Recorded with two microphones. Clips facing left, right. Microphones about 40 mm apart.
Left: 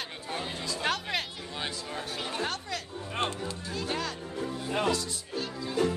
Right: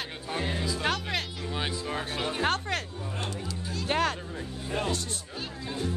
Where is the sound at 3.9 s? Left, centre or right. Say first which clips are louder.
Right 8 dB; right.